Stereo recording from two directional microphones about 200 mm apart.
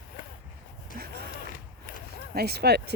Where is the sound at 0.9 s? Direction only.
45° right (ahead or behind).